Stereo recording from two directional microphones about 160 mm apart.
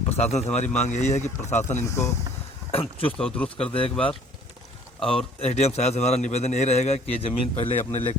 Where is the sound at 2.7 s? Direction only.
35° left (ahead or behind).